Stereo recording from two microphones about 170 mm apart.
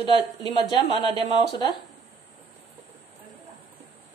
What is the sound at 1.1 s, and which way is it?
Speech, 35° right (ahead or behind).